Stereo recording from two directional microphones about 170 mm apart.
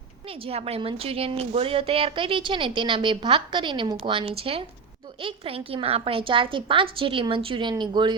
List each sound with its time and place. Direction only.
0.4 s a woman's voice: 35° right (ahead or behind)